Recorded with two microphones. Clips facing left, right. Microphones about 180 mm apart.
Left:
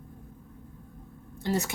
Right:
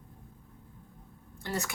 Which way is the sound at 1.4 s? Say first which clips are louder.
Left 6 dB; 20° left (ahead or behind).